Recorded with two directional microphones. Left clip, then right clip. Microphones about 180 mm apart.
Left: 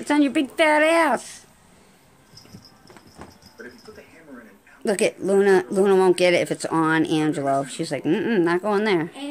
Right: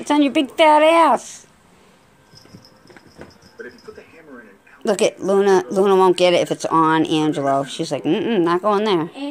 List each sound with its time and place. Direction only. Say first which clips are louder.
0.0 s speech: right 3 dB; centre (ahead or behind)
4.8 s speech: right 4 dB; centre (ahead or behind)
7.6 s speech: right 4 dB; 35° left (ahead or behind)
7.9 s speech: right 2 dB; 5° left (ahead or behind)